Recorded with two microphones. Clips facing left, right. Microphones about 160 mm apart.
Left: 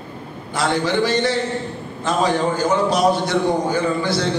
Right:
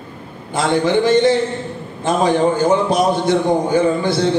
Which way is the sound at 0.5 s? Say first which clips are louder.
Right 4 dB; 20° right (ahead or behind).